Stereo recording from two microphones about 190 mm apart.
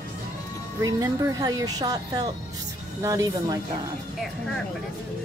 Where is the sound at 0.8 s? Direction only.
20° right (ahead or behind).